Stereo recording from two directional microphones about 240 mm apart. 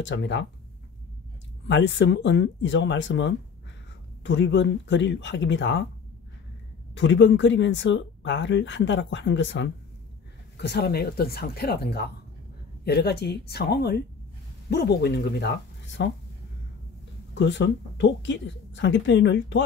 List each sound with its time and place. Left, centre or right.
0.0 s speech: left
1.7 s speech: left
7.0 s speech: left
17.3 s speech: left